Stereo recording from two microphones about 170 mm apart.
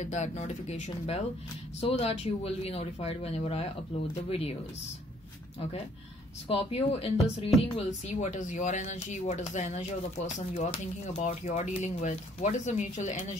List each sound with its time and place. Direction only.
0.0 s speech: 45° left (ahead or behind)
6.4 s speech: 35° left (ahead or behind)